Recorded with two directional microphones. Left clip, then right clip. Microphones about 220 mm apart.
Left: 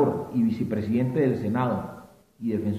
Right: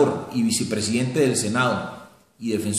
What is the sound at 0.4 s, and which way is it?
A man's voice, 20° right (ahead or behind).